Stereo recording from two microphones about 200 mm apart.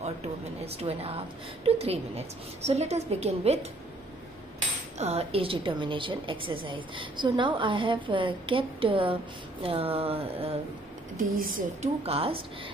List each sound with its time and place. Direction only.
0.7 s a woman's voice: 30° right (ahead or behind)
4.9 s a woman's voice: 30° right (ahead or behind)
11.1 s speech: 45° right (ahead or behind)
12.1 s a woman's voice: 30° right (ahead or behind)